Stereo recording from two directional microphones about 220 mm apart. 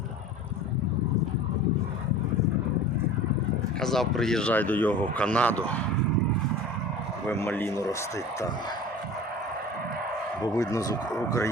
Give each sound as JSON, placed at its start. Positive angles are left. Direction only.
{"t": 3.8, "sound": "speech", "side_deg": 0}
{"t": 7.3, "sound": "speech", "side_deg": 10}
{"t": 10.4, "sound": "speech", "side_deg": 15}